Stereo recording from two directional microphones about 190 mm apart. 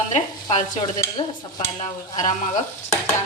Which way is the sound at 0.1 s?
30° left (ahead or behind).